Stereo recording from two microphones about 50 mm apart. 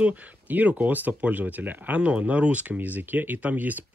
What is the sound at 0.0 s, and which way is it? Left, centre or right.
Speech, right.